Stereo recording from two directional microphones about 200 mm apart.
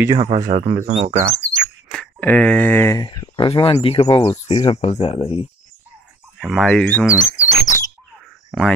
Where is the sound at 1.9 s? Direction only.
5° left (ahead or behind); by 5.4 s 30° left (ahead or behind).